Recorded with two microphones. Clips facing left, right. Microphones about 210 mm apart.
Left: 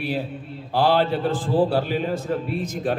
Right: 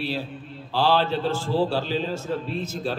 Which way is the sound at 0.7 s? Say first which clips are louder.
Left 2 dB; 55° left (ahead or behind).